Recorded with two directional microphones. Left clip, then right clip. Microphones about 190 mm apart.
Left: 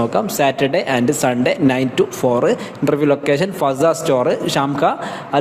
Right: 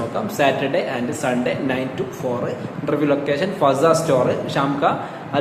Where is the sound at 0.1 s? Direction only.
50° left (ahead or behind).